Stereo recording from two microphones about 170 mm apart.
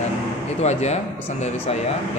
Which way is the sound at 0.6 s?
40° left (ahead or behind).